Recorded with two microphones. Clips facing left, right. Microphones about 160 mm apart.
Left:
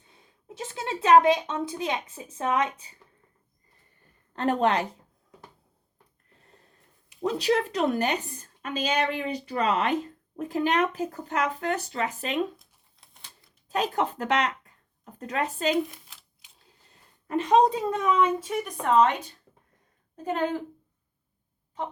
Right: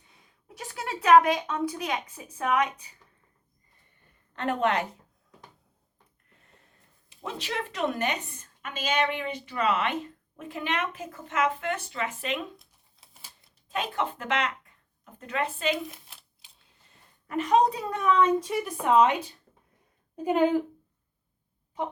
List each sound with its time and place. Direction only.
0.0 s a woman's voice: 30° left (ahead or behind)
4.4 s a woman's voice: 35° left (ahead or behind)
6.4 s a sound: 35° left (ahead or behind)
7.2 s a woman's voice: 40° left (ahead or behind)
13.0 s typewriter: 5° right (ahead or behind)
13.7 s speech: 40° left (ahead or behind)
17.2 s a woman's voice: 30° left (ahead or behind)
18.4 s speech: centre (ahead or behind)